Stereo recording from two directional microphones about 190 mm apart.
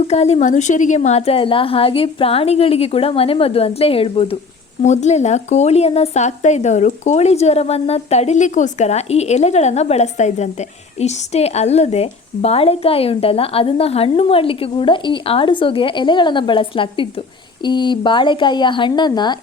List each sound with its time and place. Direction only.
0.1 s speech: 35° left (ahead or behind)